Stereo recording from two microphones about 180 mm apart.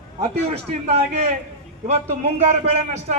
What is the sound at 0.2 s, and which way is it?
A man's voice, 35° right (ahead or behind).